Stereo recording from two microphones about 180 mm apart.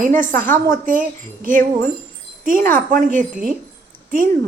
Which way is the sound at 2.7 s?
45° right (ahead or behind).